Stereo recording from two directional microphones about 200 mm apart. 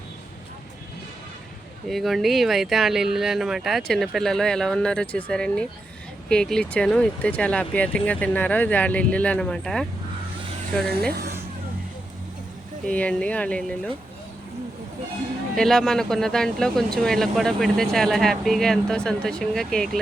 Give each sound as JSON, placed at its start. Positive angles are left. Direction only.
{"t": 1.9, "sound": "speech", "side_deg": 0}
{"t": 11.1, "sound": "speech", "side_deg": -50}
{"t": 12.8, "sound": "speech", "side_deg": 5}
{"t": 15.5, "sound": "speech", "side_deg": 0}